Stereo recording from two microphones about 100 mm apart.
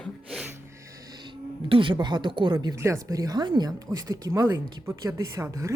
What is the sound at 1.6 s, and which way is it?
Speech, 60° right (ahead or behind).